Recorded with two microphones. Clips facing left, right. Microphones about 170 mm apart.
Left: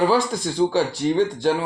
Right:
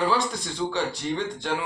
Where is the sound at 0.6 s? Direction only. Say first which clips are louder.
Left 9 dB; 30° left (ahead or behind).